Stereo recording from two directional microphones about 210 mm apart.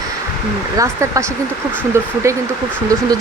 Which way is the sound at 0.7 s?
15° right (ahead or behind).